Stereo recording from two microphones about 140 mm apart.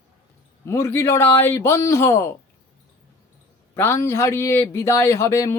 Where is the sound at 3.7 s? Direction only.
20° left (ahead or behind).